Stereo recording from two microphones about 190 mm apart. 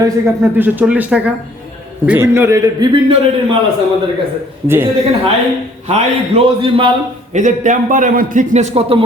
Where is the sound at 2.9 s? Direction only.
25° right (ahead or behind).